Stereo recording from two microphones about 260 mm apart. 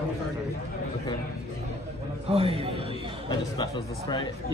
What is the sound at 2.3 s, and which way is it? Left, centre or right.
Speech, right.